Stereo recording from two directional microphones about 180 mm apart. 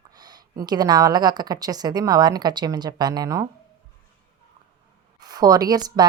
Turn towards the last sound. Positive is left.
turn(degrees=-20)  # may be behind; listen again after turning